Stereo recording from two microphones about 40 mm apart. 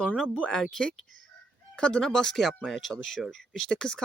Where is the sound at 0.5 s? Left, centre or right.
Centre.